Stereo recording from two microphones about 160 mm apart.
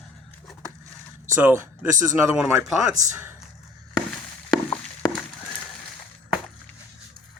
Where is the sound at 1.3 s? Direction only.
15° right (ahead or behind).